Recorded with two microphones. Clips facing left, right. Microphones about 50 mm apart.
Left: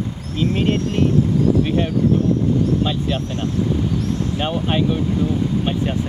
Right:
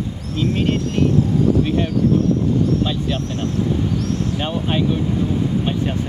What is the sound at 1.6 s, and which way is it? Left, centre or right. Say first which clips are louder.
Speech: even; centre.